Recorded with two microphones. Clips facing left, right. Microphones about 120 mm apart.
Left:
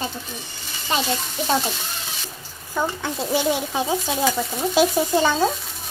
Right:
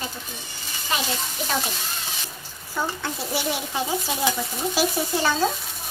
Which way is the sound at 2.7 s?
15° left (ahead or behind).